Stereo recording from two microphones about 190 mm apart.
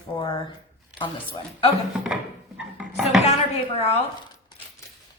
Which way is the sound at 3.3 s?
35° left (ahead or behind).